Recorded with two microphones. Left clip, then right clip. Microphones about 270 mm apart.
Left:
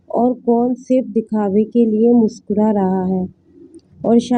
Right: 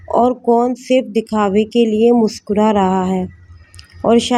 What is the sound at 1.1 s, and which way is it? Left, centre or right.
Speech, right.